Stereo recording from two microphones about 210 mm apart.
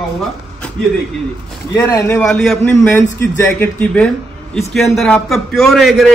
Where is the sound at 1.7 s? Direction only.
15° left (ahead or behind).